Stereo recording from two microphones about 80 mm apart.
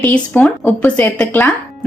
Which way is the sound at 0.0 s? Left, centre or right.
Centre.